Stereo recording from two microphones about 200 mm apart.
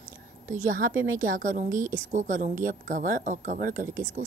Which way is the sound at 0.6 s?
40° right (ahead or behind).